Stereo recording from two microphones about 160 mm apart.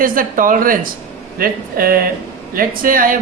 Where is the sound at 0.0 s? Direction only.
60° right (ahead or behind).